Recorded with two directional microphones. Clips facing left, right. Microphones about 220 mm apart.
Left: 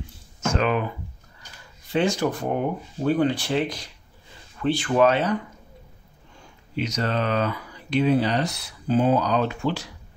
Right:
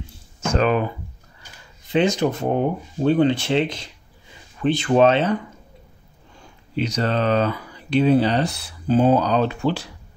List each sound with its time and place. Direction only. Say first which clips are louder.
0.6 s speech: right 4 dB; 35° right (ahead or behind)
1.9 s speech: right 3 dB; 20° right (ahead or behind)
6.8 s speech: right 4 dB; 30° right (ahead or behind)